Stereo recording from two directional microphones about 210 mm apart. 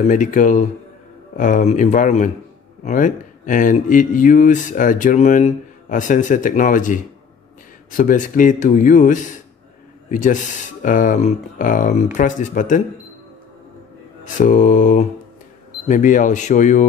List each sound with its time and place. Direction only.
0.0 s speech: 40° left (ahead or behind)
14.2 s speech: 40° left (ahead or behind)